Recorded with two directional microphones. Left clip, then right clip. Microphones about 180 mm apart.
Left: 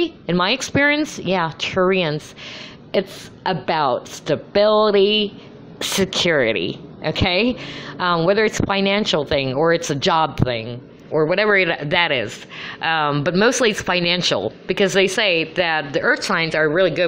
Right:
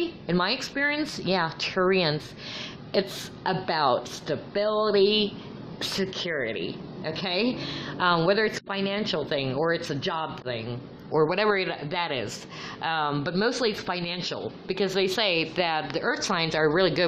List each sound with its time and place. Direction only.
0.3 s a woman's voice: 20° left (ahead or behind)
0.6 s a woman's voice: 30° left (ahead or behind)
4.3 s a woman's voice: 30° left (ahead or behind)
6.0 s a woman's voice: 40° left (ahead or behind); by 8.5 s 15° left (ahead or behind)
8.5 s speech: 30° left (ahead or behind)
10.7 s a man's voice: 5° left (ahead or behind)
11.5 s a woman's voice: 20° left (ahead or behind)
13.2 s a woman's voice: 25° left (ahead or behind)
15.1 s a woman's voice: 5° left (ahead or behind)